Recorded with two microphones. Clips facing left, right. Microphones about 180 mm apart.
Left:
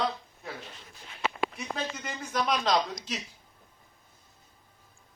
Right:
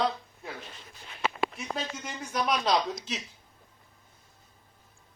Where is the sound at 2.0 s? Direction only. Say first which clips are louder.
Even; 5° right (ahead or behind).